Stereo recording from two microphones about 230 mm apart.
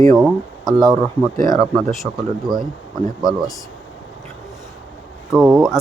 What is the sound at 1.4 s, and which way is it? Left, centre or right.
Speech, centre.